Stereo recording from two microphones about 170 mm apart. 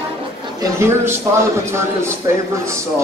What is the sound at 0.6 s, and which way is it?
A man's voice, 15° right (ahead or behind).